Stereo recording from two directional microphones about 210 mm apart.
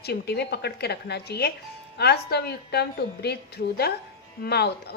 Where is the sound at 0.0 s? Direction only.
50° left (ahead or behind).